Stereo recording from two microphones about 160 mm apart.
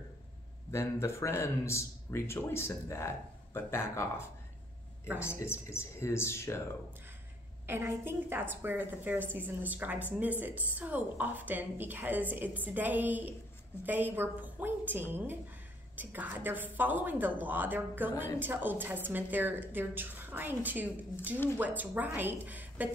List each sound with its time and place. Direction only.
0.7 s speech: 20° left (ahead or behind)
7.6 s a woman's voice: 15° right (ahead or behind)